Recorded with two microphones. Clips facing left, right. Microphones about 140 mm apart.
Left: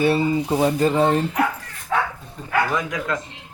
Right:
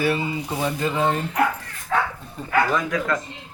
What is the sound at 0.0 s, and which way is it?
Speech, 35° left (ahead or behind).